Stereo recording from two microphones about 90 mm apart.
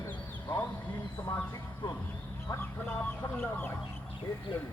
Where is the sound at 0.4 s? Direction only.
20° left (ahead or behind).